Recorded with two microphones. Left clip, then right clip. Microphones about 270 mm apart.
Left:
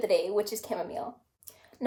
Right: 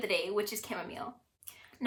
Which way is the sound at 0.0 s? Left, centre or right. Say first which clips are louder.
Left 5 dB; right.